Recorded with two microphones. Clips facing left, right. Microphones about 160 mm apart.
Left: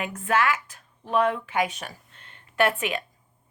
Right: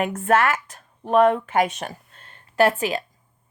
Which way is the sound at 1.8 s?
40° right (ahead or behind).